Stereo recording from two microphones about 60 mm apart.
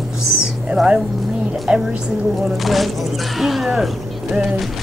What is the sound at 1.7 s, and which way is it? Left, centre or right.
Speech, centre.